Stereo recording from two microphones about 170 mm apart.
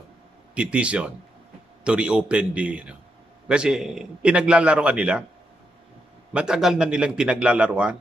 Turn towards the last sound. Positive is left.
turn(degrees=-5)  # may be behind; listen again after turning